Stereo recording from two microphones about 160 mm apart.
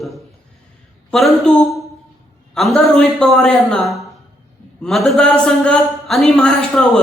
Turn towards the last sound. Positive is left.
turn(degrees=5)  # may be behind; listen again after turning